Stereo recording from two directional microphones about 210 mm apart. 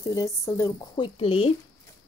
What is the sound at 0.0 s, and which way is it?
A woman's voice, 15° left (ahead or behind).